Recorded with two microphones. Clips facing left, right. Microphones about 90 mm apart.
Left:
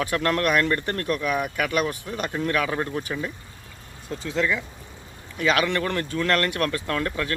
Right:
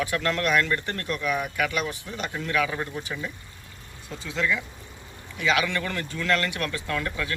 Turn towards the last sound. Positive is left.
turn(degrees=40)  # may be behind; listen again after turning